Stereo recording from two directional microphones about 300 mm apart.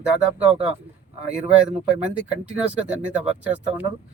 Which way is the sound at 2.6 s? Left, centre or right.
Centre.